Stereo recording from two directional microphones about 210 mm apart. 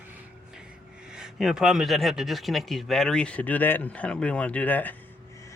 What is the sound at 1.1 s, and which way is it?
Speech, 5° right (ahead or behind).